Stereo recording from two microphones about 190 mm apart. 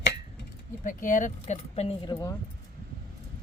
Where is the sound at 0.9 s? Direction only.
45° left (ahead or behind); by 2.3 s 20° left (ahead or behind).